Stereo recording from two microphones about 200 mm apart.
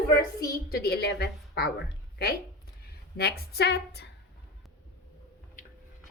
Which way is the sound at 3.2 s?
50° left (ahead or behind).